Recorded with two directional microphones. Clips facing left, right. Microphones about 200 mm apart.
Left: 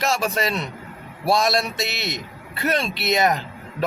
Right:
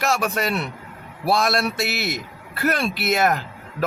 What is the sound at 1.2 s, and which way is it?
Speech, centre (ahead or behind).